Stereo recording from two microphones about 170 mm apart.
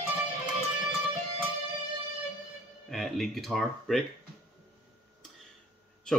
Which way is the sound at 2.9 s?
Centre (ahead or behind).